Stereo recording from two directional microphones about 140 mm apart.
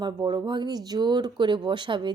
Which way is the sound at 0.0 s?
30° right (ahead or behind).